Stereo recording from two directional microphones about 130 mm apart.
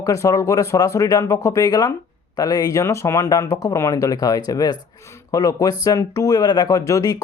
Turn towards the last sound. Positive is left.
turn(degrees=25)  # may be behind; listen again after turning